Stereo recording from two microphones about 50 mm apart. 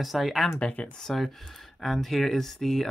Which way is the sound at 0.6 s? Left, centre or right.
Left.